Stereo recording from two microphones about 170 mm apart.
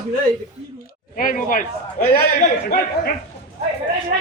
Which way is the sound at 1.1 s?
55° left (ahead or behind).